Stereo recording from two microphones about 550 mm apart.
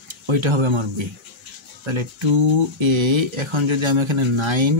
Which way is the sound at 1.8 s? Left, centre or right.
Right.